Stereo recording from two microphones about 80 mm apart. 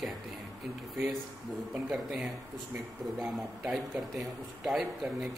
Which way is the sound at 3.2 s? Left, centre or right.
Centre.